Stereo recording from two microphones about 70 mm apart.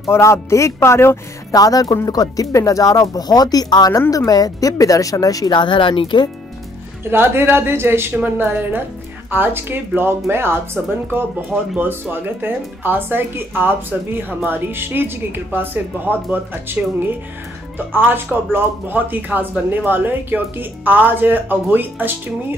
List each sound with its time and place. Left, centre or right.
0.0 s speech: left
1.5 s speech: left
6.1 s speech: left
7.1 s speech: right